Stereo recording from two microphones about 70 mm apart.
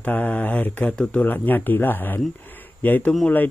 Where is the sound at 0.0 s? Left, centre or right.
Left.